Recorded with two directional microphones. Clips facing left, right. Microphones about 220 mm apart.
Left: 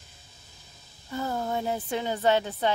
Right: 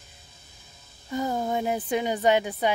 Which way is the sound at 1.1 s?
15° right (ahead or behind).